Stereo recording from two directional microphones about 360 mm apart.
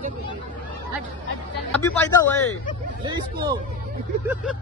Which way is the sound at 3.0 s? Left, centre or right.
Centre.